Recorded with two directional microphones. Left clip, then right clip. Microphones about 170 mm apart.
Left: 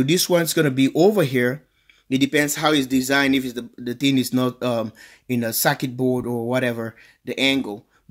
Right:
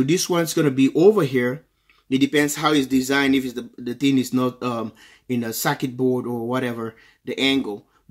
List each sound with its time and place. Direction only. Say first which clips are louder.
0.0 s speech: left 2 dB; 30° left (ahead or behind)